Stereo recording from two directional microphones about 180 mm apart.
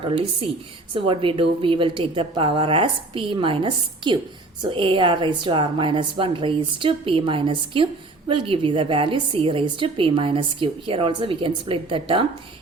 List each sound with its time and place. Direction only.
0.0 s a woman's voice: 30° right (ahead or behind)